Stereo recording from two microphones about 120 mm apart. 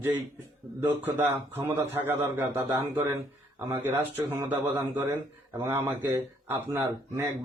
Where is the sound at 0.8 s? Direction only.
15° right (ahead or behind).